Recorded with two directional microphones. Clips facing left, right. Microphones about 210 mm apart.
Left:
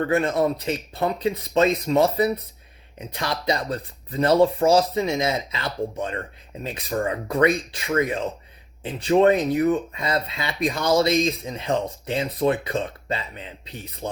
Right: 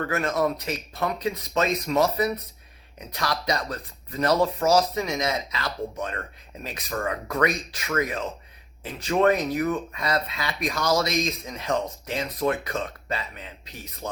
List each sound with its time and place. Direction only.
0.0 s speech: 25° left (ahead or behind)